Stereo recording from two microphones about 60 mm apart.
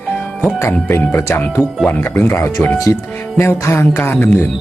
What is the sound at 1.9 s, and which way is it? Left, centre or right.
Speech, left.